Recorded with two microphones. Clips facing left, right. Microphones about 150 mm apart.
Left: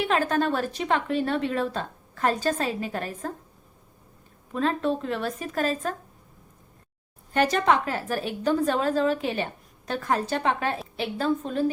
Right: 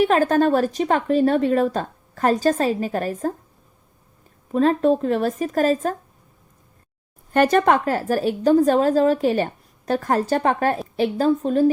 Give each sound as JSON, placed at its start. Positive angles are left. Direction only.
{"t": 0.0, "sound": "a woman's voice", "side_deg": -40}
{"t": 4.5, "sound": "a woman's voice", "side_deg": -40}
{"t": 7.3, "sound": "a woman's voice", "side_deg": -50}